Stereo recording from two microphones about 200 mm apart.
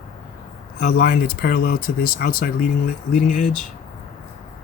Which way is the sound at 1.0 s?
45° left (ahead or behind).